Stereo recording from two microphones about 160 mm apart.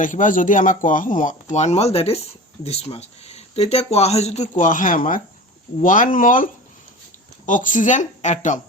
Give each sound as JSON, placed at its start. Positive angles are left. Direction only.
{"t": 0.0, "sound": "speech", "side_deg": 55}
{"t": 1.5, "sound": "speech", "side_deg": 45}